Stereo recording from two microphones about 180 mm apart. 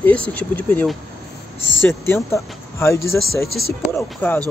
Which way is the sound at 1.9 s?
15° left (ahead or behind).